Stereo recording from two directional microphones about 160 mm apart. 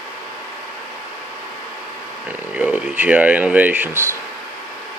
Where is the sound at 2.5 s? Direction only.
10° right (ahead or behind).